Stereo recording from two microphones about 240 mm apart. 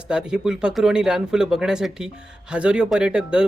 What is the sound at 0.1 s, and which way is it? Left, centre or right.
Speech, centre.